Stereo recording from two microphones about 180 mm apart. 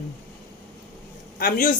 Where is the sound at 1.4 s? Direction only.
50° left (ahead or behind).